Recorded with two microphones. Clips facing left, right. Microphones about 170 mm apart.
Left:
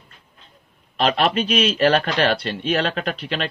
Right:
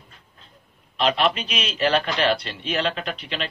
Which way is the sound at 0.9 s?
40° left (ahead or behind).